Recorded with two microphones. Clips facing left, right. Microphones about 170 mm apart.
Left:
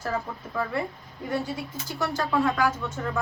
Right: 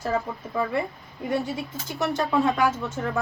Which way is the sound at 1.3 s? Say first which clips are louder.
Right 2 dB; 20° right (ahead or behind).